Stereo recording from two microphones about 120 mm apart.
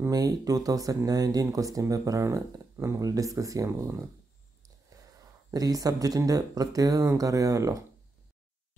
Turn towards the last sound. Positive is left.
turn(degrees=-30)  # may be behind; listen again after turning